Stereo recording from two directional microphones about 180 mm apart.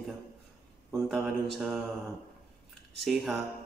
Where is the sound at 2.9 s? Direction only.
Centre (ahead or behind).